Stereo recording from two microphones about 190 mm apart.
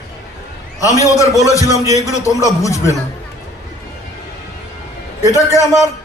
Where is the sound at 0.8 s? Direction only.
15° left (ahead or behind).